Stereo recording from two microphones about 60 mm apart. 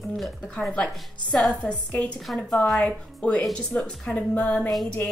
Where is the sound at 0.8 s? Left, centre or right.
Centre.